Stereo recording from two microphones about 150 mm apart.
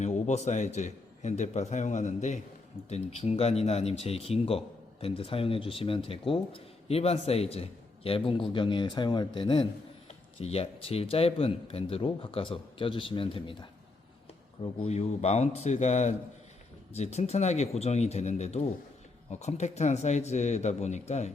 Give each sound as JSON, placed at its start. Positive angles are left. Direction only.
{"t": 0.0, "sound": "a man's voice", "side_deg": 50}
{"t": 10.4, "sound": "a man's voice", "side_deg": 40}